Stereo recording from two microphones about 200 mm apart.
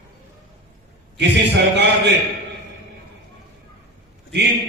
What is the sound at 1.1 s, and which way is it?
Speech, 60° right (ahead or behind).